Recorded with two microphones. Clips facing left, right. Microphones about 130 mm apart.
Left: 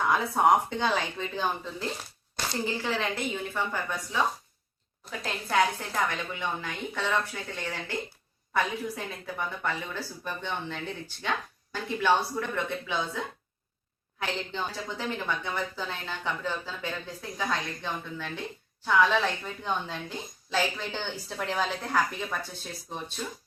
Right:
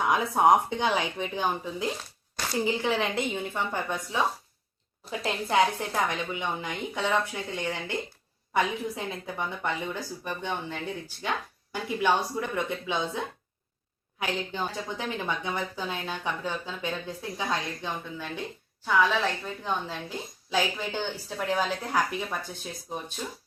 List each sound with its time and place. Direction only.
0.0 s a woman's voice: 15° right (ahead or behind)
18.9 s a woman's voice: centre (ahead or behind)